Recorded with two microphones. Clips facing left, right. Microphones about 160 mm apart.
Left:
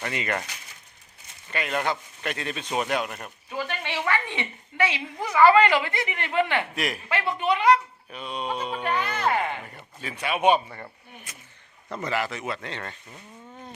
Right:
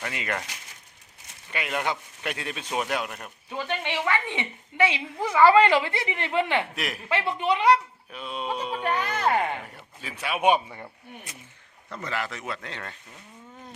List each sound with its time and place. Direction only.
0.0 s a man's voice: 5° right (ahead or behind)
1.5 s a man's voice: 10° right (ahead or behind)
3.7 s a woman's voice: 20° right (ahead or behind)
6.7 s a man's voice: centre (ahead or behind)
7.1 s a woman's voice: 25° right (ahead or behind)
8.1 s a man's voice: centre (ahead or behind)
8.8 s speech: 40° right (ahead or behind)
9.6 s a man's voice: centre (ahead or behind)
11.9 s speech: 20° left (ahead or behind)
12.1 s a man's voice: 5° left (ahead or behind)